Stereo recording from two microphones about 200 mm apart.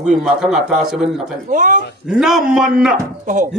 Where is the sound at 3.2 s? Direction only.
40° right (ahead or behind).